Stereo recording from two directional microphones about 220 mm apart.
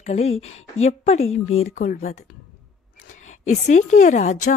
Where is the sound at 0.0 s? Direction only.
30° left (ahead or behind).